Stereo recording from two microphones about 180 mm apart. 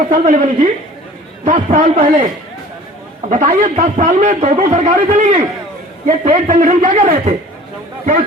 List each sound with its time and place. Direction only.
0.0 s a man's voice: 50° right (ahead or behind)
3.2 s a man's voice: 45° right (ahead or behind)